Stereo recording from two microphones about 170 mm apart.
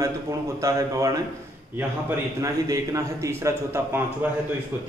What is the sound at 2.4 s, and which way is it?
A man's voice, 20° right (ahead or behind).